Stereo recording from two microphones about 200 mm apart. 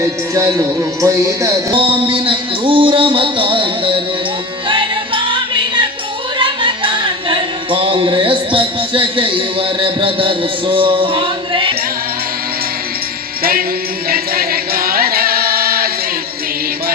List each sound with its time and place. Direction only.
0.0 s speech: 15° right (ahead or behind)
1.7 s a sound: 25° right (ahead or behind)
4.7 s music: 25° right (ahead or behind)
13.4 s music: 45° right (ahead or behind)